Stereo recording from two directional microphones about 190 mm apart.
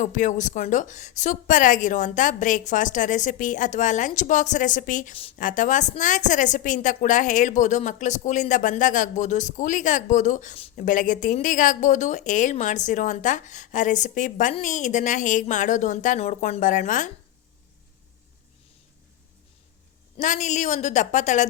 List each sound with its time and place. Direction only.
0.0 s a woman's voice: 40° left (ahead or behind)
20.1 s a woman's voice: 40° left (ahead or behind)